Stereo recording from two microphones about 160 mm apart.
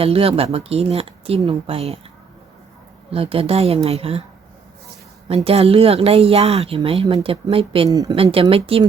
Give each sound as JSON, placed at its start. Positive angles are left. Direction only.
{"t": 0.0, "sound": "a woman's voice", "side_deg": -35}
{"t": 3.1, "sound": "a woman's voice", "side_deg": -35}
{"t": 5.3, "sound": "a woman's voice", "side_deg": -40}
{"t": 7.9, "sound": "speech", "side_deg": -20}
{"t": 8.1, "sound": "a woman's voice", "side_deg": -35}